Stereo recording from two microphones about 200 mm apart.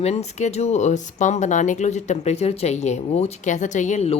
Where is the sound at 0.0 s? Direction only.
30° left (ahead or behind).